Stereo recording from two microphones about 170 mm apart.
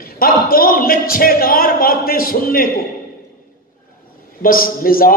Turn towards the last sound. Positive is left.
turn(degrees=55)  # may be behind; listen again after turning